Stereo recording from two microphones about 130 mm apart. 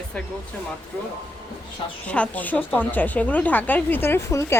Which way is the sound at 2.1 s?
10° left (ahead or behind).